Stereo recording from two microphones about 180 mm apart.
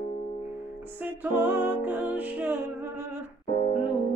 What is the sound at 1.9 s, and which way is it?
Music, 10° right (ahead or behind).